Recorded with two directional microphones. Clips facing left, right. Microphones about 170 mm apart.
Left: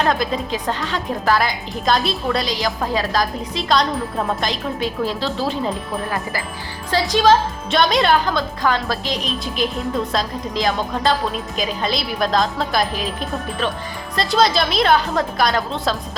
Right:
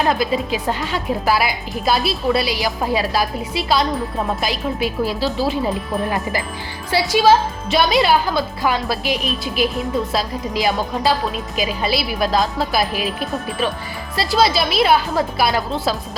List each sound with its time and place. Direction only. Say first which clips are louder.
0.0 s a woman's voice: right 1 dB; 5° right (ahead or behind)
6.1 s speech: right 3 dB; 20° right (ahead or behind)
6.9 s a woman's voice: right 1 dB; 10° right (ahead or behind)